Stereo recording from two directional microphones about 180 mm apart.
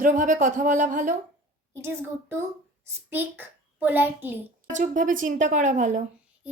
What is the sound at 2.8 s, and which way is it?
A child's voice, 10° right (ahead or behind).